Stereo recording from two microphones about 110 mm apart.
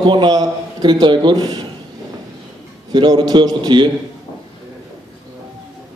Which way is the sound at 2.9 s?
45° right (ahead or behind).